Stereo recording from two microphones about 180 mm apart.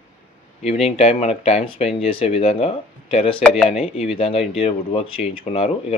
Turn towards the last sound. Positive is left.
turn(degrees=35)  # may be behind; listen again after turning